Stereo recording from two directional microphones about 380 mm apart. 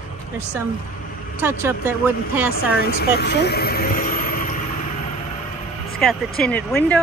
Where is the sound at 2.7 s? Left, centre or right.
Left.